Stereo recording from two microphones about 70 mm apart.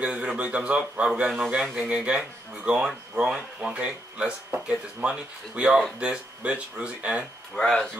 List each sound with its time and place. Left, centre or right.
0.0 s a man's voice: centre
3.7 s a man's voice: centre
7.5 s speech: centre